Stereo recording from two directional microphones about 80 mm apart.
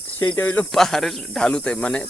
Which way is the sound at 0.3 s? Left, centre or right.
Left.